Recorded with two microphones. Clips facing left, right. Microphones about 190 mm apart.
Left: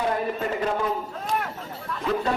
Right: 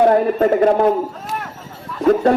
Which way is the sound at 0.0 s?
55° right (ahead or behind).